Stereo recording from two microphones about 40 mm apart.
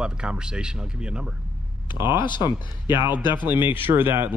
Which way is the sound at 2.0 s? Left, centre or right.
Right.